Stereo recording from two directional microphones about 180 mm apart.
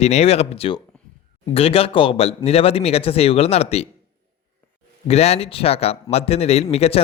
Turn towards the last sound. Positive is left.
turn(degrees=35)  # may be behind; listen again after turning